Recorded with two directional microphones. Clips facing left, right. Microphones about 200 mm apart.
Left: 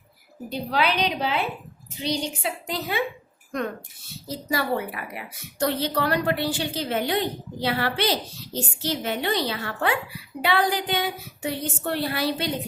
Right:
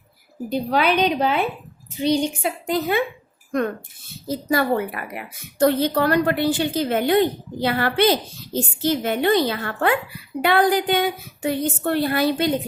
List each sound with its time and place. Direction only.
0.5 s a woman's voice: 50° right (ahead or behind)
4.3 s a woman's voice: 55° right (ahead or behind)